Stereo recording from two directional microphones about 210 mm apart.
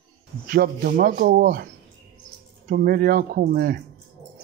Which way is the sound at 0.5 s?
45° right (ahead or behind).